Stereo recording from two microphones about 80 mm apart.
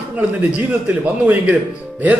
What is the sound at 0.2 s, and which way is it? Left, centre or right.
A man's voice, centre.